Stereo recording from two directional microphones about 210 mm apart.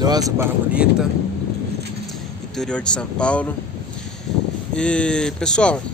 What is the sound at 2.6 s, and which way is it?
Speech, 5° left (ahead or behind).